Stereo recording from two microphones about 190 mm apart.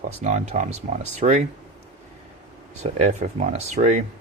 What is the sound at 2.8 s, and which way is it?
Speech, 35° right (ahead or behind).